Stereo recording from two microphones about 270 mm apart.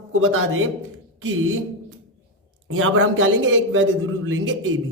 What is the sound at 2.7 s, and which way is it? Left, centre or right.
A man's voice, right.